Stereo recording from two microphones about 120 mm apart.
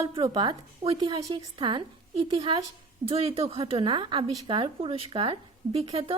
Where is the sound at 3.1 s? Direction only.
55° right (ahead or behind).